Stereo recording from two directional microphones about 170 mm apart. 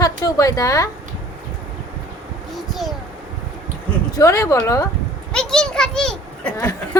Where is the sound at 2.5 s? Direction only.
Centre (ahead or behind).